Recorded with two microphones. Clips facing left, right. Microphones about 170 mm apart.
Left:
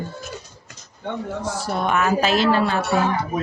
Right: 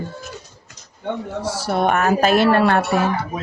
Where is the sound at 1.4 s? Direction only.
60° right (ahead or behind).